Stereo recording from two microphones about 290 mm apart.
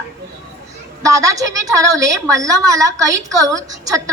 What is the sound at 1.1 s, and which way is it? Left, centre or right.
A woman's voice, centre.